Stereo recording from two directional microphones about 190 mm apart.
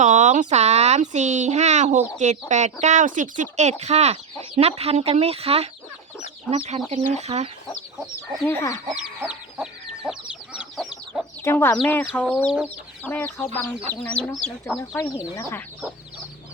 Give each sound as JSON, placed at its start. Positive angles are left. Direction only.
{"t": 0.0, "sound": "speech", "side_deg": -40}
{"t": 6.7, "sound": "speech", "side_deg": -35}
{"t": 8.4, "sound": "speech", "side_deg": 15}
{"t": 9.0, "sound": "chicken", "side_deg": -5}
{"t": 11.1, "sound": "chicken", "side_deg": 10}
{"t": 11.8, "sound": "speech", "side_deg": 10}